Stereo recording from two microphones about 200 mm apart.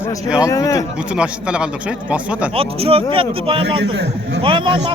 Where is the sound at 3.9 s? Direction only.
60° right (ahead or behind).